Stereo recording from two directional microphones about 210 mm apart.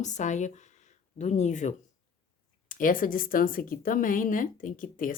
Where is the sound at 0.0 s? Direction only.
35° left (ahead or behind).